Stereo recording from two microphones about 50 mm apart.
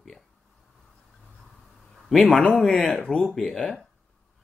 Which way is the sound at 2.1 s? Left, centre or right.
Centre.